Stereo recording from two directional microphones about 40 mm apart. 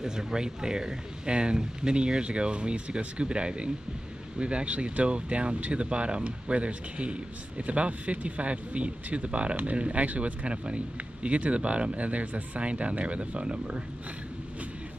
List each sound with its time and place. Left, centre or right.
0.0 s speech: centre